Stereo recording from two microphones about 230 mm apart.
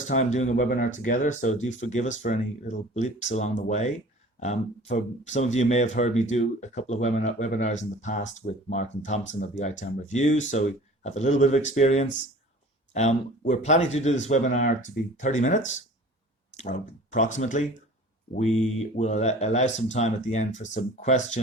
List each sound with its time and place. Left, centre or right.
0.1 s speech: left